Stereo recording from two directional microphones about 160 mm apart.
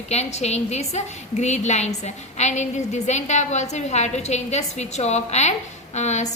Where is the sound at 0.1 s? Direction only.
45° left (ahead or behind).